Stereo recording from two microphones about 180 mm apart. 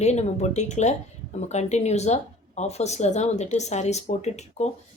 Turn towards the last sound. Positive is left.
turn(degrees=40)  # may be behind; listen again after turning